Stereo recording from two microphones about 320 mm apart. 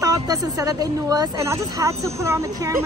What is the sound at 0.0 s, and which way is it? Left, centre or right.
Speech, centre.